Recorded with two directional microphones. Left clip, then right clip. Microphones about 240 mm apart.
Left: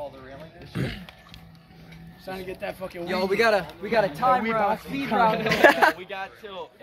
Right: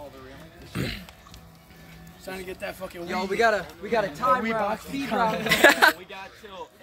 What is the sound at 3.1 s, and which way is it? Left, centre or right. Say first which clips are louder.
Speech: left 1 dB; left.